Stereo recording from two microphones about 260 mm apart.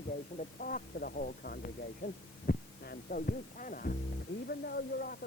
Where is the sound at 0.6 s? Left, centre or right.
Left.